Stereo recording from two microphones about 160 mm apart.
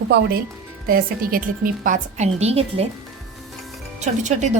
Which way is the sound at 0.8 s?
65° right (ahead or behind).